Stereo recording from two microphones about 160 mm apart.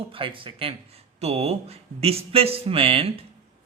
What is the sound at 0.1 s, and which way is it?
Speech, 35° right (ahead or behind).